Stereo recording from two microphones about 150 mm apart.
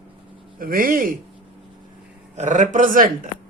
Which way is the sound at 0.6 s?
70° right (ahead or behind).